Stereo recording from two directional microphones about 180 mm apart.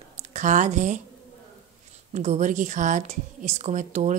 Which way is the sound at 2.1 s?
40° right (ahead or behind).